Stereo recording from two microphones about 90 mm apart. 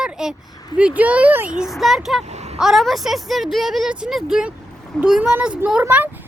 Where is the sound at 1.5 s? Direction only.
5° right (ahead or behind).